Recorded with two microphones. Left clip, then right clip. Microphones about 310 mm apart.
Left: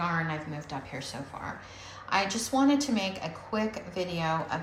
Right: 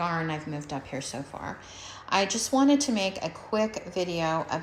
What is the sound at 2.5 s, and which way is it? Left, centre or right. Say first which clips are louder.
Speech: right 2 dB; centre.